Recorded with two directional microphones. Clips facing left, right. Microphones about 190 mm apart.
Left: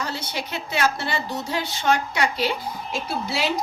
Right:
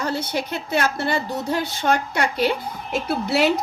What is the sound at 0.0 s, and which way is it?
A woman's voice, 55° right (ahead or behind).